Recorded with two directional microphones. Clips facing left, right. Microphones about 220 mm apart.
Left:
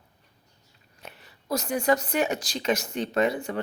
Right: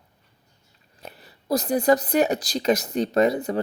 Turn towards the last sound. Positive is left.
turn(degrees=-35)  # may be behind; listen again after turning